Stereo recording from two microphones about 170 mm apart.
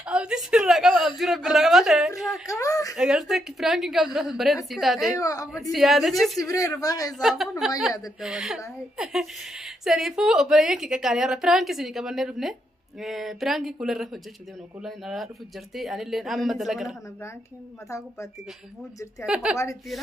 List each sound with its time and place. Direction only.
0.0 s a sound: 5° right (ahead or behind)
2.4 s a sound: 20° left (ahead or behind)
3.0 s a woman's voice: centre (ahead or behind)
5.2 s a woman's voice: 20° left (ahead or behind)
5.7 s a woman's voice: centre (ahead or behind)
6.4 s a woman's voice: 20° left (ahead or behind)
7.2 s a woman's voice: centre (ahead or behind)
19.2 s a woman's voice: 5° right (ahead or behind)